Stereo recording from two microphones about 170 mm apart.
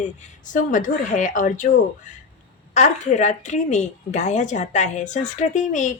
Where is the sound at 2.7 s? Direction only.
45° left (ahead or behind).